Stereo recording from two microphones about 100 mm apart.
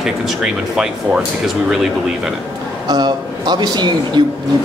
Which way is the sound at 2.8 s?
45° right (ahead or behind).